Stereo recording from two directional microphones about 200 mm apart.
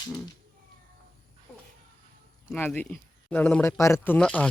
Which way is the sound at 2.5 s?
10° left (ahead or behind).